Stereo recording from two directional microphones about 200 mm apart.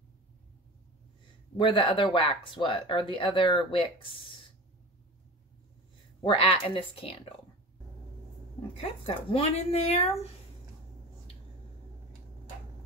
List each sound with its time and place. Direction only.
1.6 s speech: 25° left (ahead or behind)
6.2 s speech: 25° left (ahead or behind)
8.8 s speech: 30° left (ahead or behind)